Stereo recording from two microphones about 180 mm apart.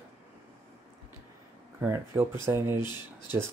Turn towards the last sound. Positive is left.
turn(degrees=25)  # may be behind; listen again after turning